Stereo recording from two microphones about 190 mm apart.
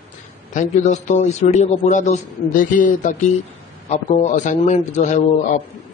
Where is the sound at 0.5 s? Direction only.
40° left (ahead or behind).